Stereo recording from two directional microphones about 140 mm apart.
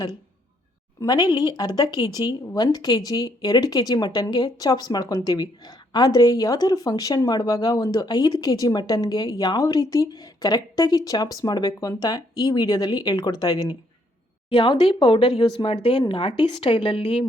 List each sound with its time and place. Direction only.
1.0 s speech: 30° left (ahead or behind)